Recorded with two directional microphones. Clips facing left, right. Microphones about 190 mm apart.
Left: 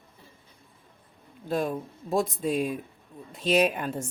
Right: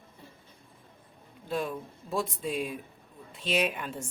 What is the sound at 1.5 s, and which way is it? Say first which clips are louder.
A woman's voice: left 4 dB; 45° left (ahead or behind).